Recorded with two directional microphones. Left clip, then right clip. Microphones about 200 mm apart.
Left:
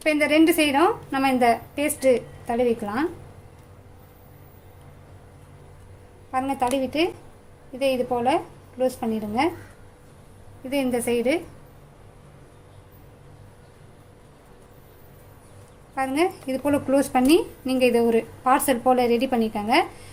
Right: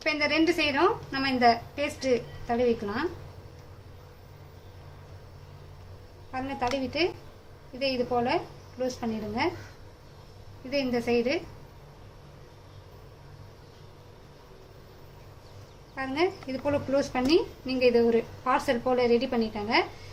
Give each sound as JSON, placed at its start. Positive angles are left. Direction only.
{"t": 0.0, "sound": "a woman's voice", "side_deg": 45}
{"t": 6.3, "sound": "a woman's voice", "side_deg": 45}
{"t": 10.7, "sound": "a woman's voice", "side_deg": 50}
{"t": 16.0, "sound": "a woman's voice", "side_deg": 45}